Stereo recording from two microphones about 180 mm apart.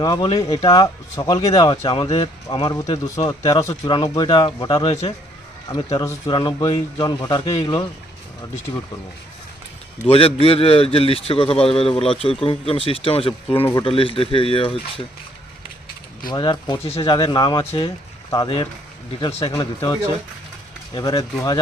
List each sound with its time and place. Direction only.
0.0 s speech: 25° left (ahead or behind)
6.0 s speech: 20° left (ahead or behind)
10.1 s a man's voice: 30° left (ahead or behind)
16.3 s a man's voice: 25° left (ahead or behind)
19.5 s speech: 20° left (ahead or behind)